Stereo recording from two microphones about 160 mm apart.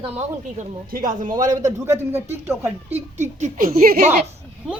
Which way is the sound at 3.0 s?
45° right (ahead or behind).